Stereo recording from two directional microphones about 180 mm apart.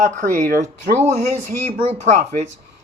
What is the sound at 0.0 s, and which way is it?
Speech, 50° right (ahead or behind).